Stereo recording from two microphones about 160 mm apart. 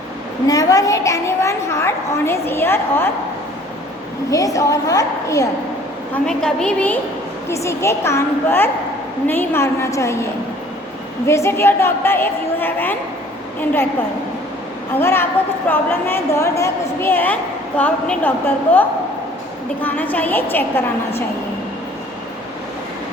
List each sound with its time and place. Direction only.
0.4 s a woman's voice: 20° left (ahead or behind)
4.3 s a woman's voice: 20° left (ahead or behind)
6.2 s a woman's voice: 5° left (ahead or behind)
11.3 s a woman's voice: 15° left (ahead or behind)
14.9 s a woman's voice: 15° left (ahead or behind)